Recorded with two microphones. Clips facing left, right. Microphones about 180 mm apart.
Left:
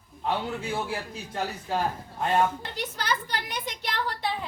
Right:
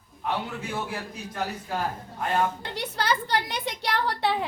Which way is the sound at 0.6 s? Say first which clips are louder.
Left 1 dB; 30° left (ahead or behind).